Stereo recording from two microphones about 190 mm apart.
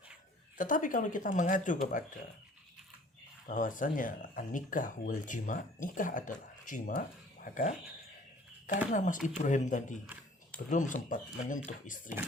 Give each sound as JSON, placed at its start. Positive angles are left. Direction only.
{"t": 0.5, "sound": "speech", "side_deg": 45}
{"t": 3.4, "sound": "speech", "side_deg": 45}
{"t": 8.9, "sound": "speech", "side_deg": 45}